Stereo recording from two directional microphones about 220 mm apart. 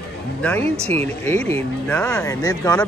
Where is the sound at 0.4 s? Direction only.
5° left (ahead or behind).